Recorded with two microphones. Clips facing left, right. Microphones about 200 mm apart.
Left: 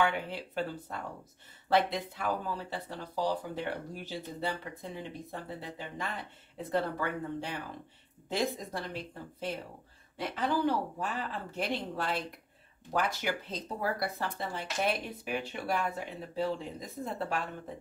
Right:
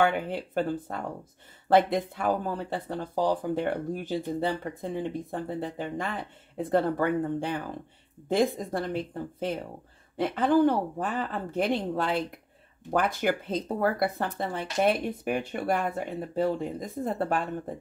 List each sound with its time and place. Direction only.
0.0 s speech: 50° right (ahead or behind)